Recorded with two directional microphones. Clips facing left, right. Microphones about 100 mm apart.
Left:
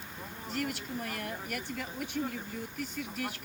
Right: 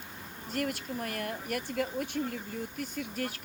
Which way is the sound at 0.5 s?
45° right (ahead or behind).